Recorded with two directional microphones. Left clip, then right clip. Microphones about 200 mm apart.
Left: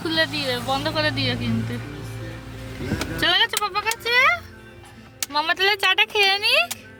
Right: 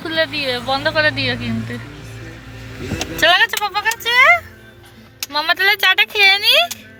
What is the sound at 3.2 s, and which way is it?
Speech, 5° right (ahead or behind).